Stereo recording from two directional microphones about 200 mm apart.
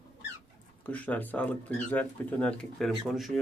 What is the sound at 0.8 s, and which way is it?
Speech, 10° left (ahead or behind).